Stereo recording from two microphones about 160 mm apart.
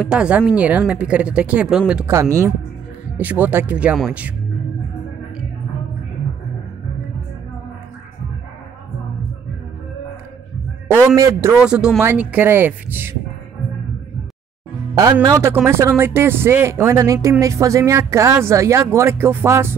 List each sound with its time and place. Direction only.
0.0 s speech: 5° right (ahead or behind)
2.0 s speech: 15° right (ahead or behind)
11.1 s a man's voice: 20° right (ahead or behind)
11.5 s speech: 5° right (ahead or behind)
15.2 s speech: 20° right (ahead or behind)